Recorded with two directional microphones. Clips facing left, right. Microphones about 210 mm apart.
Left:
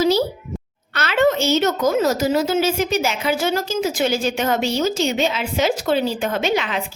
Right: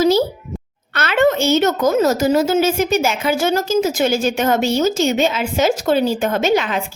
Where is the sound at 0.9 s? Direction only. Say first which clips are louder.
Right 2 dB; 55° right (ahead or behind).